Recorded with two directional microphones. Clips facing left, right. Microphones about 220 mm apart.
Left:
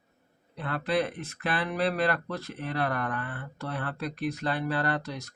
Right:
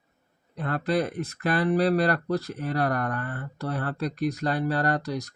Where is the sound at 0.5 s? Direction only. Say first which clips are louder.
Right 3 dB; 40° right (ahead or behind).